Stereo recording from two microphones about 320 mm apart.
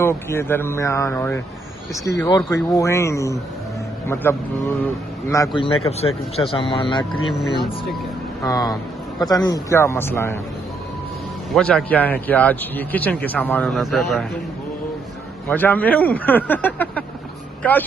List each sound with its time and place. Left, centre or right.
0.0 s speech: centre
8.4 s speech: centre
11.5 s speech: centre
15.4 s speech: centre